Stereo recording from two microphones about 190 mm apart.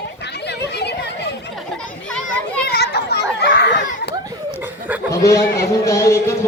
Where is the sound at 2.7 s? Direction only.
60° left (ahead or behind).